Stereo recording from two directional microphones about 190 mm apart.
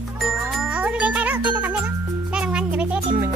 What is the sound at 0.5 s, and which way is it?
Music, 5° right (ahead or behind).